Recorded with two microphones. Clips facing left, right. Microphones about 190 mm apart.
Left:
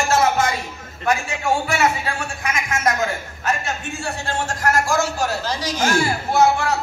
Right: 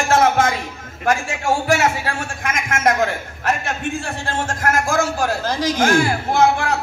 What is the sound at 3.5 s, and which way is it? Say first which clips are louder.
A man's voice: right 3 dB; 55° right (ahead or behind).